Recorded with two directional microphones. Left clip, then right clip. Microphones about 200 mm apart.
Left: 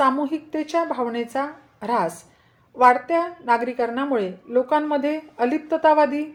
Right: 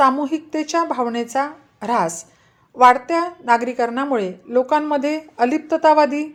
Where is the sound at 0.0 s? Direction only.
30° right (ahead or behind).